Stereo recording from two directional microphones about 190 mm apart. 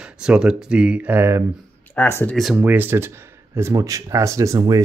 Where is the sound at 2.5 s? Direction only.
10° right (ahead or behind).